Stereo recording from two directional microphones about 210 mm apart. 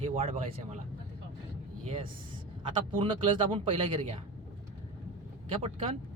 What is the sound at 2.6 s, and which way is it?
Speech, 25° right (ahead or behind).